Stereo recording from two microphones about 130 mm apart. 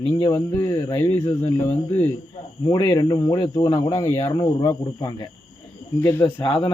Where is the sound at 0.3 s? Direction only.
20° left (ahead or behind).